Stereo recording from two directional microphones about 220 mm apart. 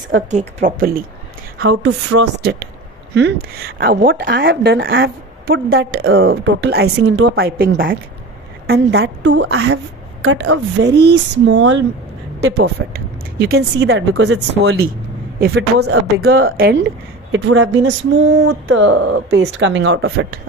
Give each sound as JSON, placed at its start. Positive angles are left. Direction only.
{"t": 0.3, "sound": "speech", "side_deg": -30}
{"t": 1.6, "sound": "speech", "side_deg": -55}
{"t": 17.3, "sound": "speech", "side_deg": -55}